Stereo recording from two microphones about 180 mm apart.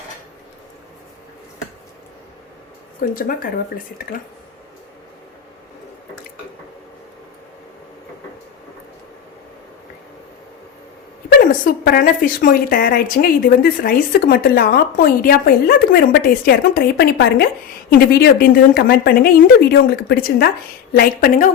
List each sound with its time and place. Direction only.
3.0 s a woman's voice: 50° left (ahead or behind)
11.3 s a woman's voice: 55° left (ahead or behind)